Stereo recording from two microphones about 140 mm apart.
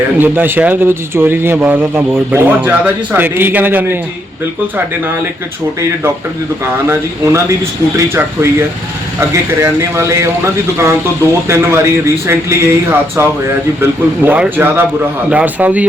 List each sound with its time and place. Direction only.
0.2 s speech: 15° right (ahead or behind)
6.7 s speech: 15° right (ahead or behind)